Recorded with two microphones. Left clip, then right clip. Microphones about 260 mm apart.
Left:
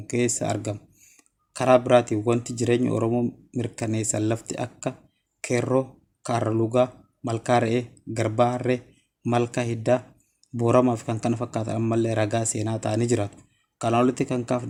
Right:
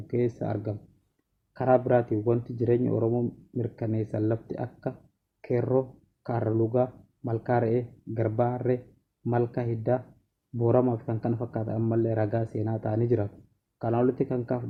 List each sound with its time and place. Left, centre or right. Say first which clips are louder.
0.1 s a man's voice: left 4 dB; left
6.7 s a man's voice: left 5 dB; left